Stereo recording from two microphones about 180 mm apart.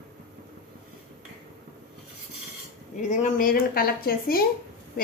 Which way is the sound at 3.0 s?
45° left (ahead or behind).